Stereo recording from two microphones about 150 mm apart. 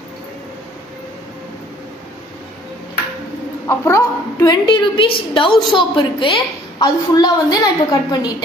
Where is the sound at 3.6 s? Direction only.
20° left (ahead or behind).